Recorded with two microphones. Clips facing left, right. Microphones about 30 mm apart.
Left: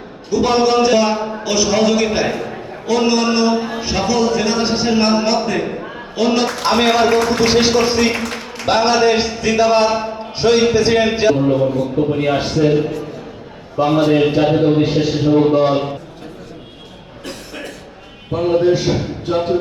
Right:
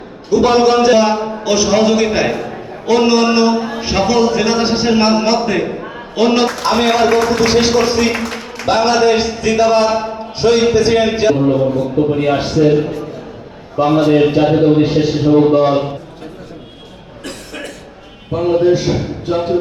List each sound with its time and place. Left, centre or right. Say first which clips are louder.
0.3 s a man's voice: right 3 dB; right
0.9 s a man's voice: right 3 dB; centre
2.3 s a sound: right 2 dB; centre
2.8 s speech: right 4 dB; right
3.5 s a sound: right 1 dB; centre
3.8 s speech: right 3 dB; right
5.6 s a sound: right 2 dB; centre
6.1 s speech: right 3 dB; right
6.5 s a man's voice: right 1 dB; centre
18.3 s a man's voice: right 2 dB; centre